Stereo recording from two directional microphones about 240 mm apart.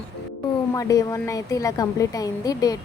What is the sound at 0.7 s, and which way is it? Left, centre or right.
A woman's voice, centre.